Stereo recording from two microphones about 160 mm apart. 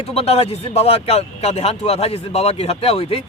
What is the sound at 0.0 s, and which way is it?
Speech, 40° left (ahead or behind).